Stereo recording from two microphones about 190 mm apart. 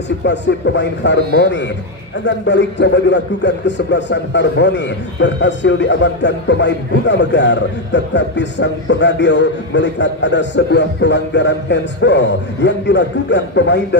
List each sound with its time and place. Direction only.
0.2 s speech: 65° left (ahead or behind)